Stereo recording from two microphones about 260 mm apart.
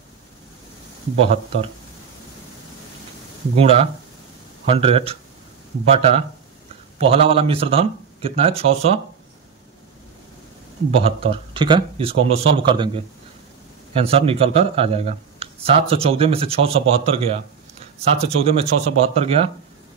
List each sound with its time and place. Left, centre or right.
1.2 s speech: right
3.5 s speech: right
11.0 s speech: right